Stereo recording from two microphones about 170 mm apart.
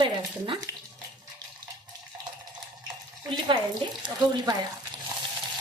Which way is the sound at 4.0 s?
25° right (ahead or behind).